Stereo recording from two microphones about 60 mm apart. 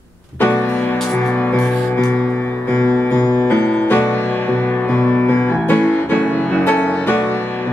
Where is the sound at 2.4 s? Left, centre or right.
Left.